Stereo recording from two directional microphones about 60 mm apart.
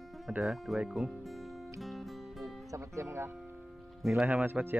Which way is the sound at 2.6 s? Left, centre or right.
Right.